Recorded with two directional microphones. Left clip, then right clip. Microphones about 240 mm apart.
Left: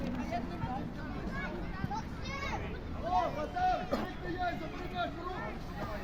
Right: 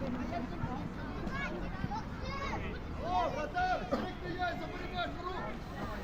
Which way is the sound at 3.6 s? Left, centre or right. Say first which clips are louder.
Left 2 dB; centre.